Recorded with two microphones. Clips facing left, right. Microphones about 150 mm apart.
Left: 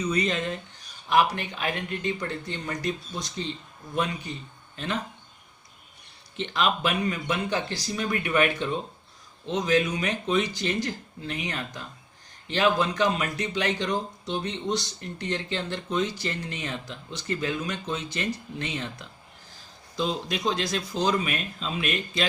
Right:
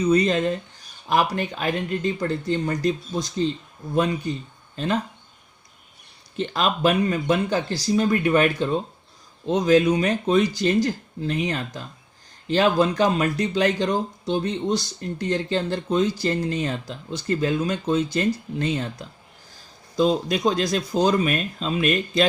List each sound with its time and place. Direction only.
0.1 s speech: 35° right (ahead or behind)
6.3 s speech: 40° right (ahead or behind)